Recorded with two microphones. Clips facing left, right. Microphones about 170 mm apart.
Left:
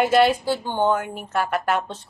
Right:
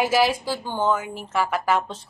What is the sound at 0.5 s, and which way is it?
Speech, 20° left (ahead or behind).